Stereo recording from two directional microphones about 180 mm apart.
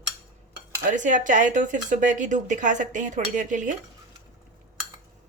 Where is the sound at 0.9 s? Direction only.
45° right (ahead or behind).